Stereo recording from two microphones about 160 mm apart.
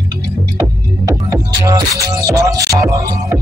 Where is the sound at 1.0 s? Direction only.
20° right (ahead or behind).